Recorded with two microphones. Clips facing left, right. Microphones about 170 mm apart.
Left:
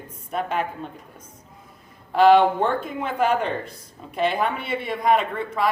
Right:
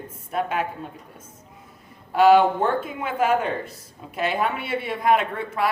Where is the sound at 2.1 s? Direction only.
5° right (ahead or behind).